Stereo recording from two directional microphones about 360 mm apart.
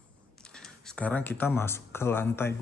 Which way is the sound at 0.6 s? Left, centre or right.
Centre.